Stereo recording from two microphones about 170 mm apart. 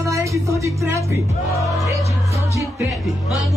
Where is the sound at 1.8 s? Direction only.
20° right (ahead or behind).